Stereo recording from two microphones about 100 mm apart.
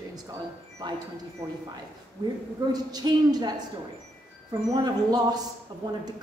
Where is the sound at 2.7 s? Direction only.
40° right (ahead or behind).